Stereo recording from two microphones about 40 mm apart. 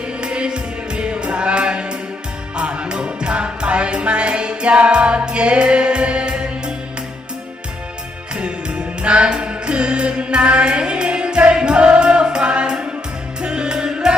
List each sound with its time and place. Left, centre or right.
0.2 s music: right
8.4 s music: right